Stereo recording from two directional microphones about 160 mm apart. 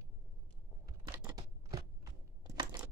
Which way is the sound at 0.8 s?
20° right (ahead or behind).